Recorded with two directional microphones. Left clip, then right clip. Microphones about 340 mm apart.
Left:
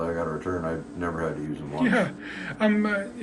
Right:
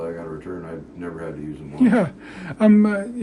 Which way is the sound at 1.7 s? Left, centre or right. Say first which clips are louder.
Right 5 dB; centre.